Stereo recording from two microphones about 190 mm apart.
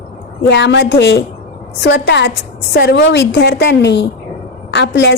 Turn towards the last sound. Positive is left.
turn(degrees=65)  # may be behind; listen again after turning